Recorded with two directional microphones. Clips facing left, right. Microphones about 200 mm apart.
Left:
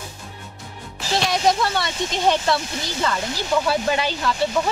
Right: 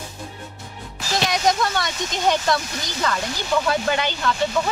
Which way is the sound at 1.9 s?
30° left (ahead or behind).